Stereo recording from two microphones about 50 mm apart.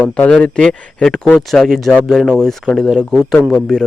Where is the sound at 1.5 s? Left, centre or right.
Centre.